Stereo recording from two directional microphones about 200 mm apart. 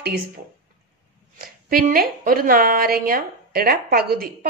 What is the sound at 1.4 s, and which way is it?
A woman's voice, 45° right (ahead or behind).